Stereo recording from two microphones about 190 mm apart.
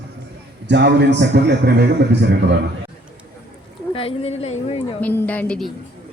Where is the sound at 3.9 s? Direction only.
30° left (ahead or behind).